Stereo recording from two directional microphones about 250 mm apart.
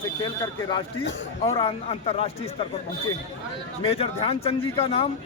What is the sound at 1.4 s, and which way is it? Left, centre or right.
A man's voice, left.